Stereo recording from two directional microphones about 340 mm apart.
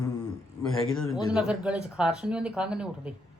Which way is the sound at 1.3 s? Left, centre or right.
Centre.